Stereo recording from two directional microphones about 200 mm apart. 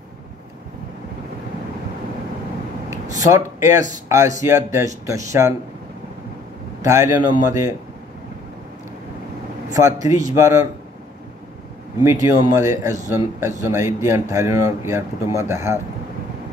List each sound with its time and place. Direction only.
3.3 s speech: 15° right (ahead or behind)
6.8 s speech: 15° right (ahead or behind)
9.8 s speech: 15° right (ahead or behind)
12.0 s speech: 15° right (ahead or behind)